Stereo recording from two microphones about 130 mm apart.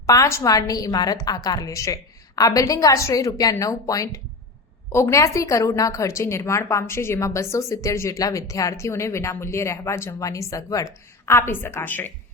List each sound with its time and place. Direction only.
0.0 s a woman's voice: 25° left (ahead or behind)